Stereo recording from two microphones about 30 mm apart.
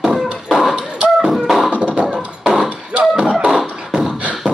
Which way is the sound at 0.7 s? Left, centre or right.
Right.